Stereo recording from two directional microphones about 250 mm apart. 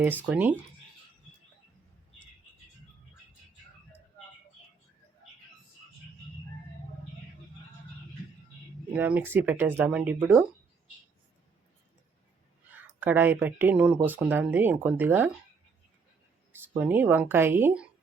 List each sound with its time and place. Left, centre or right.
0.0 s speech: centre
8.9 s speech: centre
13.0 s speech: centre
16.7 s speech: centre